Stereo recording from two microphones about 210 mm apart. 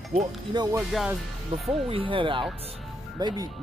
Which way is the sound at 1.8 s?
25° right (ahead or behind).